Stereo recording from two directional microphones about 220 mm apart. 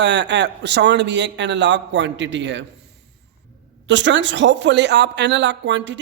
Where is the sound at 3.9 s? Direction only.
55° right (ahead or behind).